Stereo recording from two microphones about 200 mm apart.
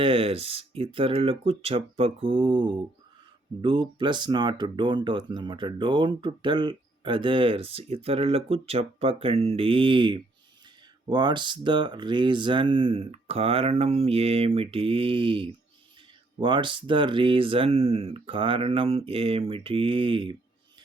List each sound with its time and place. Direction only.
0.0 s speech: 25° right (ahead or behind)